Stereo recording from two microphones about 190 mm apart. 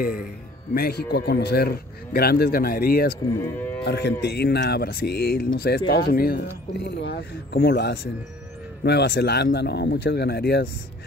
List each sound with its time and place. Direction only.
0.0 s a man's voice: 50° left (ahead or behind)
3.4 s moo: 10° left (ahead or behind)
3.8 s speech: 60° left (ahead or behind)